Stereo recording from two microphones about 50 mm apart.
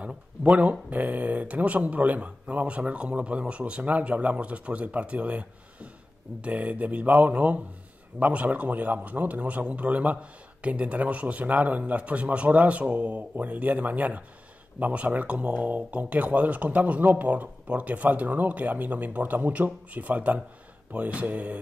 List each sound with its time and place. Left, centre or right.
0.0 s speech: right